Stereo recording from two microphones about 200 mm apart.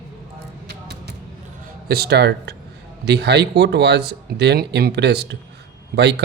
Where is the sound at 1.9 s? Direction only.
55° right (ahead or behind).